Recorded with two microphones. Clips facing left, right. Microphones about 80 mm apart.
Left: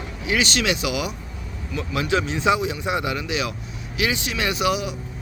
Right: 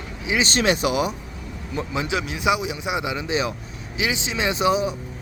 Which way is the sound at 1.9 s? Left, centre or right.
Right.